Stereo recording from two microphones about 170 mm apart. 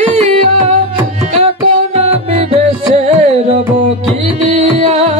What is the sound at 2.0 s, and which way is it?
Music, 40° right (ahead or behind).